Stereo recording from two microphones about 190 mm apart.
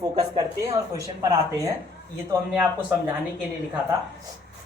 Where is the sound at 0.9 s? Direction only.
15° right (ahead or behind).